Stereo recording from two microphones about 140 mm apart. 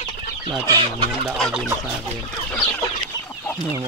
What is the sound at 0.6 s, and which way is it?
Chicken, 30° right (ahead or behind).